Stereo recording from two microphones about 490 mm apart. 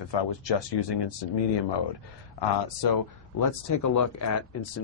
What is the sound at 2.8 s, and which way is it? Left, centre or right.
Speech, left.